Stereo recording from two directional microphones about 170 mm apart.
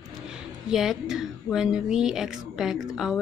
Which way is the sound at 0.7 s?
Centre (ahead or behind).